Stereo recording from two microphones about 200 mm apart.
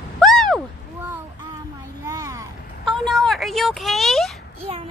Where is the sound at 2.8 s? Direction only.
Centre (ahead or behind).